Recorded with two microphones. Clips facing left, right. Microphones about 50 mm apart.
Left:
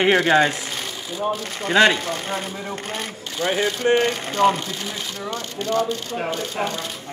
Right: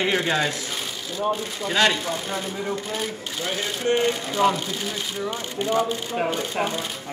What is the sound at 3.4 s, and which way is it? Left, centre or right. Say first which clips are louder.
Speech: left 7 dB; left.